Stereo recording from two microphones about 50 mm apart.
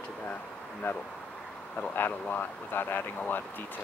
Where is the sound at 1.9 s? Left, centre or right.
Left.